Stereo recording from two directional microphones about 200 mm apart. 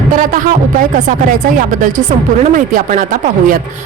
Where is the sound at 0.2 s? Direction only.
40° right (ahead or behind).